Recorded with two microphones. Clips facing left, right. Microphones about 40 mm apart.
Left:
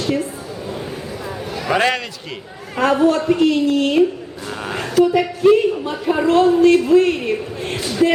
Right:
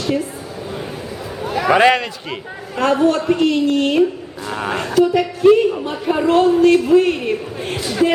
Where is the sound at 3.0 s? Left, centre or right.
Centre.